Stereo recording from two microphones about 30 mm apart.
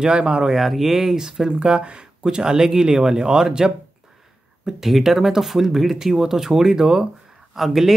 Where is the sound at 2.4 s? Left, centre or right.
Centre.